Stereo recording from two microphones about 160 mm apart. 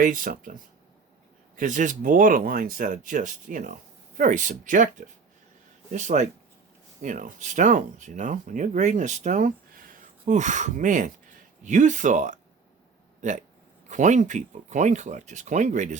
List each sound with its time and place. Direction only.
0.0 s speech: 60° right (ahead or behind)